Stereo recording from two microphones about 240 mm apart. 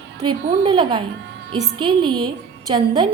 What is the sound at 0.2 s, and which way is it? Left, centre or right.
A woman's voice, right.